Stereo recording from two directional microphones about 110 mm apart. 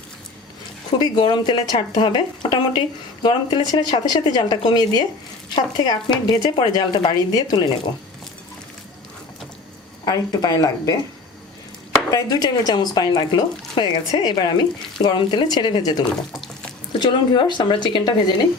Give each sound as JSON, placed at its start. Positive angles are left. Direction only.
{"t": 0.9, "sound": "speech", "side_deg": 40}
{"t": 10.1, "sound": "speech", "side_deg": 35}
{"t": 12.1, "sound": "speech", "side_deg": 35}
{"t": 16.3, "sound": "water", "side_deg": 5}
{"t": 17.0, "sound": "speech", "side_deg": 45}